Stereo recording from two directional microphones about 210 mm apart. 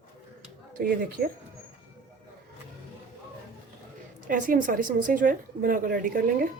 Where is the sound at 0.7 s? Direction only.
40° right (ahead or behind).